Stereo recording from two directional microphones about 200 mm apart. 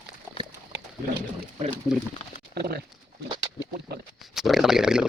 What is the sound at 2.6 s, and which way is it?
Speech, 50° right (ahead or behind).